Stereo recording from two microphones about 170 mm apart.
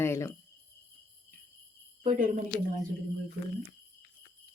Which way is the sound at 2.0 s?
50° right (ahead or behind).